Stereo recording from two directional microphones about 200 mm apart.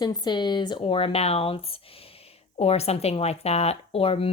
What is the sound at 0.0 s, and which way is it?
Speech, 20° left (ahead or behind).